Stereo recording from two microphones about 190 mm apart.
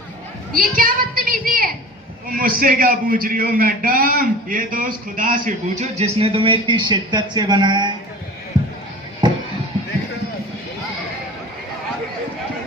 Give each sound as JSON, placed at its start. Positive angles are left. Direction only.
{"t": 0.5, "sound": "a child's voice", "side_deg": -50}
{"t": 8.5, "sound": "a sound", "side_deg": -25}
{"t": 9.2, "sound": "music", "side_deg": -20}